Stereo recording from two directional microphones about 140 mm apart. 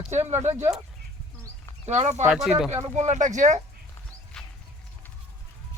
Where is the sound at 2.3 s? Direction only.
5° right (ahead or behind).